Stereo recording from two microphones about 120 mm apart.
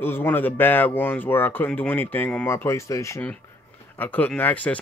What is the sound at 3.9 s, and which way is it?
Speech, 15° left (ahead or behind).